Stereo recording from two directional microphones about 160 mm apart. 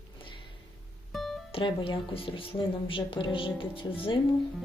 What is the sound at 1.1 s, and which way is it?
Music, centre (ahead or behind).